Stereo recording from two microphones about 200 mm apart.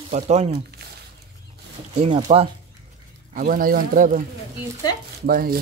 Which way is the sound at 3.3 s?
45° right (ahead or behind).